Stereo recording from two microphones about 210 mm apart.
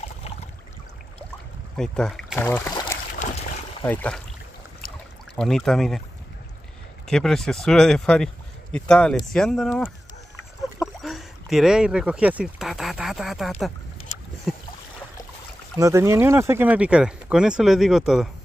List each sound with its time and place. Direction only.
1.8 s speech: centre (ahead or behind)
2.7 s boat: 20° left (ahead or behind)
3.1 s a sound: 35° left (ahead or behind)
3.8 s speech: 5° left (ahead or behind)
5.3 s speech: centre (ahead or behind)
7.1 s speech: centre (ahead or behind)
14.5 s boat: centre (ahead or behind)
15.8 s speech: 15° right (ahead or behind)